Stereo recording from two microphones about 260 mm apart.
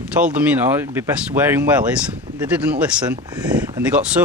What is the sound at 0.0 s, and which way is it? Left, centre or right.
Speech, centre.